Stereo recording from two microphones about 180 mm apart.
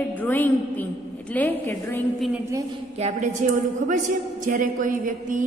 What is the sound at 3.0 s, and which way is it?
A woman's voice, 40° right (ahead or behind).